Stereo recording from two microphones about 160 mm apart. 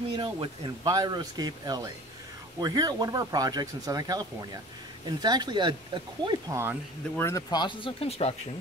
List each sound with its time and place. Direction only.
0.1 s speech: 30° right (ahead or behind)
6.2 s speech: 15° right (ahead or behind)
7.2 s speech: 20° left (ahead or behind); by 8.4 s 40° left (ahead or behind)